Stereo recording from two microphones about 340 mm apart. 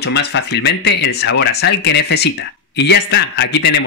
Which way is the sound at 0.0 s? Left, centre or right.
Left.